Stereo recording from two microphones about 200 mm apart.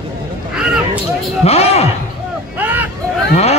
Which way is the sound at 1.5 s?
30° left (ahead or behind).